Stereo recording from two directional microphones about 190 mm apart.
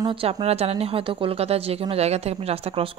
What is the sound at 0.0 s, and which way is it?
A woman's voice, 30° right (ahead or behind).